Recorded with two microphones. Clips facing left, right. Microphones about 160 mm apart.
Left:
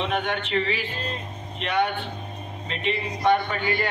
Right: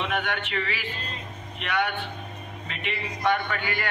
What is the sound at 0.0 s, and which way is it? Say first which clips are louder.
A man's voice: left 3 dB; 25° left (ahead or behind).